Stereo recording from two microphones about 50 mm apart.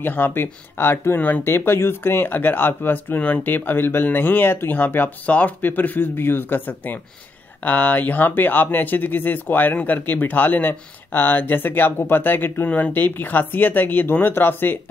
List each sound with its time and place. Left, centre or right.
0.0 s speech: left
3.5 s speech: left
12.6 s speech: left
12.9 s speech: left